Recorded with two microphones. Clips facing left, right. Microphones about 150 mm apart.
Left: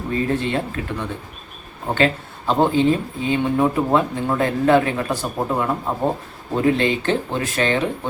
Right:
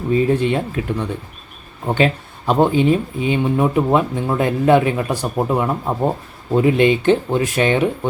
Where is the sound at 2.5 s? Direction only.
15° right (ahead or behind).